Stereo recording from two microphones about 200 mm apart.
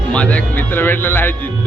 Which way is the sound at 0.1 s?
5° left (ahead or behind).